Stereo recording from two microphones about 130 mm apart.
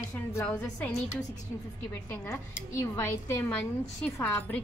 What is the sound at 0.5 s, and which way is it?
Speech, 10° left (ahead or behind).